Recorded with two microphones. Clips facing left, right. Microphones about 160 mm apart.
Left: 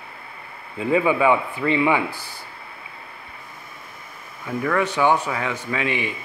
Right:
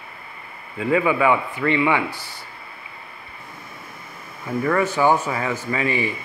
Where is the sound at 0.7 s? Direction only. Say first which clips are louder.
Even; 20° left (ahead or behind).